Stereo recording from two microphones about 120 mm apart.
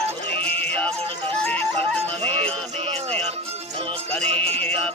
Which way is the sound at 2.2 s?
55° right (ahead or behind).